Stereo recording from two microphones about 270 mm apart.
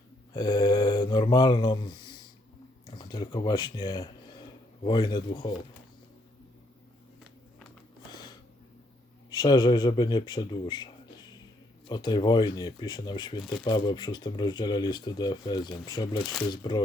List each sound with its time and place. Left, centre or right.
0.3 s speech: centre
8.1 s a sound: centre
9.3 s speech: centre